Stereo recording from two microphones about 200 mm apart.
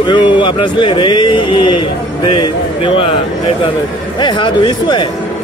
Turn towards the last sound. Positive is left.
turn(degrees=25)  # may be behind; listen again after turning